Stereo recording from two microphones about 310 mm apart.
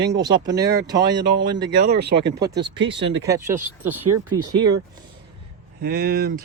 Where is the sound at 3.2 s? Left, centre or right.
Centre.